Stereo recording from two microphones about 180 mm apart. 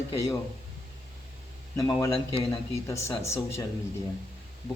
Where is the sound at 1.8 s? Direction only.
15° left (ahead or behind).